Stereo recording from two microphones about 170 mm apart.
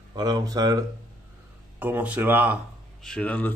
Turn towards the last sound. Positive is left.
turn(degrees=10)  # may be behind; listen again after turning